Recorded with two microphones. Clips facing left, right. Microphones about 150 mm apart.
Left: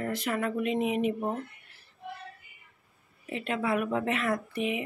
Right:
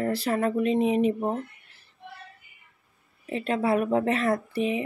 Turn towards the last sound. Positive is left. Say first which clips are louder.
# right 4 dB
turn(degrees=-35)  # may be behind; listen again after turning